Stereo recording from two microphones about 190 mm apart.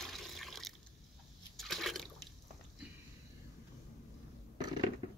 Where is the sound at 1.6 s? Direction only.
Centre (ahead or behind).